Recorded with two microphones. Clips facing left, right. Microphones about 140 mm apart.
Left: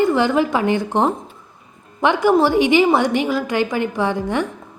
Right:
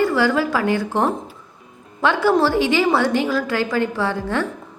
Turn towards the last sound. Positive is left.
turn(degrees=15)  # may be behind; listen again after turning